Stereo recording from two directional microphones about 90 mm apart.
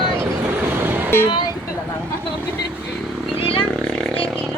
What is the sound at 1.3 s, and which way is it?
Vehicle, 50° left (ahead or behind).